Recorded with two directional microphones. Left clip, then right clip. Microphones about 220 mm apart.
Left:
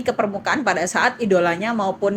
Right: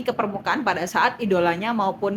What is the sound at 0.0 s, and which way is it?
A woman's voice, 5° left (ahead or behind).